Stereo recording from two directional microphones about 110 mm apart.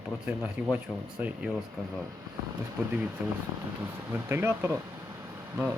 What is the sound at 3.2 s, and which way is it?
Speech, 10° right (ahead or behind).